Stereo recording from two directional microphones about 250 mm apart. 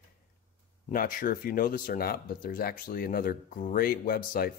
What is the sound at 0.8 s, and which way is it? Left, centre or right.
Speech, left.